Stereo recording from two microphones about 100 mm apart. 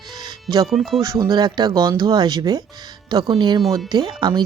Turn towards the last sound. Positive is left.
turn(degrees=-45)  # may be behind; listen again after turning